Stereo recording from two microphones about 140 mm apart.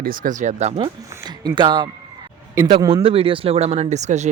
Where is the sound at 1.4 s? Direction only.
30° right (ahead or behind).